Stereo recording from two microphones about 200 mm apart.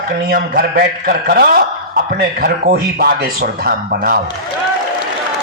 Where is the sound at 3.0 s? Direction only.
50° right (ahead or behind).